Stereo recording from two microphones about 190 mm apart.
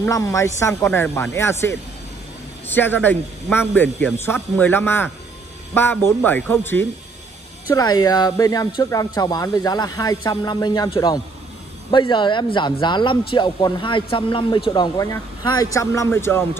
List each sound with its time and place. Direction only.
0.0 s speech: 15° left (ahead or behind)